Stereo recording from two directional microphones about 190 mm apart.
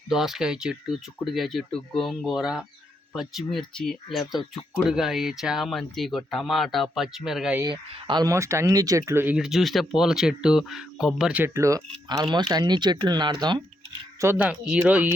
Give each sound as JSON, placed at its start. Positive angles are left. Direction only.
{"t": 0.1, "sound": "speech", "side_deg": 0}
{"t": 7.6, "sound": "speech", "side_deg": -25}
{"t": 14.2, "sound": "speech", "side_deg": -10}